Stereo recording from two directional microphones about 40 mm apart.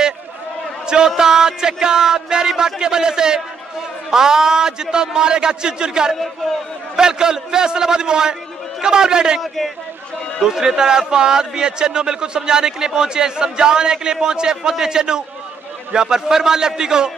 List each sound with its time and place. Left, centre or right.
0.8 s a man's voice: centre
10.4 s a man's voice: centre